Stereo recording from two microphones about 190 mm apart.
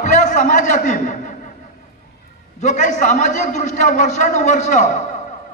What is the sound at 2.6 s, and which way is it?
A man's voice, 40° left (ahead or behind).